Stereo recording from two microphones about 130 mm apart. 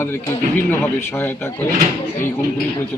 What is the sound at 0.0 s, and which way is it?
Speech, 20° left (ahead or behind).